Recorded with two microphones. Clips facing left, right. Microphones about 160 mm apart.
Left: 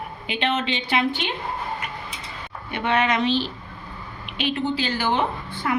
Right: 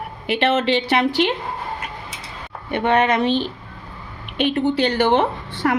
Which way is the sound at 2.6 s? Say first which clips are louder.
Right 5 dB; 50° right (ahead or behind).